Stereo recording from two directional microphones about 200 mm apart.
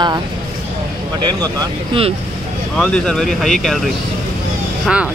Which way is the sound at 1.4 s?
20° right (ahead or behind).